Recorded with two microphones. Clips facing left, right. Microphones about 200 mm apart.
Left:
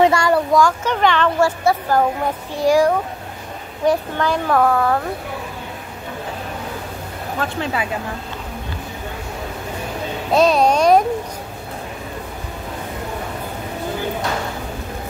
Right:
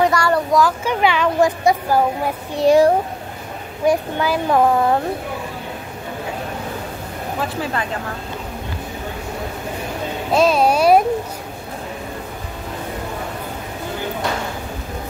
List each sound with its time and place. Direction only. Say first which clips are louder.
0.0 s a sound: left 2 dB; 25° left (ahead or behind)
0.3 s a woman's voice: left 1 dB; centre (ahead or behind)
2.6 s speech: right 2 dB; 25° right (ahead or behind)
3.8 s a woman's voice: even; 10° right (ahead or behind)
7.3 s speech: left 1 dB; 5° right (ahead or behind)
10.3 s a child's voice: left 1 dB; centre (ahead or behind)